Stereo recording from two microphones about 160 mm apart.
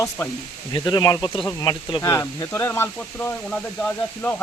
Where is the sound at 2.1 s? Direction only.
15° left (ahead or behind).